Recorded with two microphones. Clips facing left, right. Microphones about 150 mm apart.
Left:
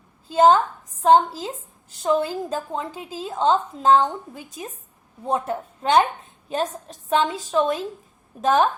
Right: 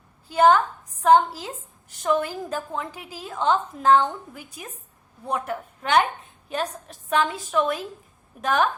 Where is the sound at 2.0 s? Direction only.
15° left (ahead or behind); by 7.2 s 30° left (ahead or behind).